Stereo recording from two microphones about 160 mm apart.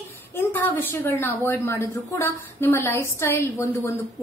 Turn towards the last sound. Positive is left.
turn(degrees=15)  # may be behind; listen again after turning